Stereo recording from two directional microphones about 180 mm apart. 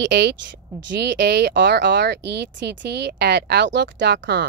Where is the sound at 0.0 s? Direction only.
75° right (ahead or behind).